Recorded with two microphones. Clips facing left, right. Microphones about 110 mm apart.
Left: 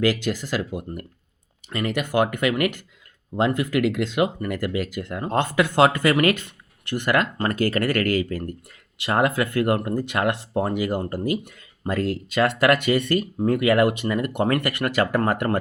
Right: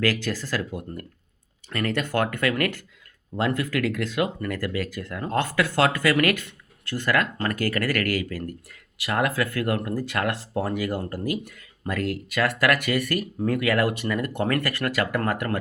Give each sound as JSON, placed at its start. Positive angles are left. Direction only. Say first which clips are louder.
{"t": 0.0, "sound": "speech", "louder": "left 3 dB", "side_deg": 20}